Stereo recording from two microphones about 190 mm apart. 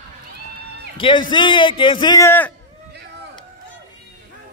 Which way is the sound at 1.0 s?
25° left (ahead or behind).